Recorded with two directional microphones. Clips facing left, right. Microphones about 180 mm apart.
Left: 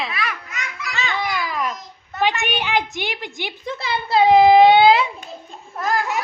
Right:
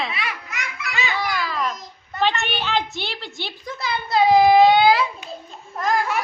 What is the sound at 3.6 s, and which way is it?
A child's voice, 30° left (ahead or behind).